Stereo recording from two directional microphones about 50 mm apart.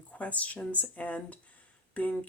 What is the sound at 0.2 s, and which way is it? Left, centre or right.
Speech, left.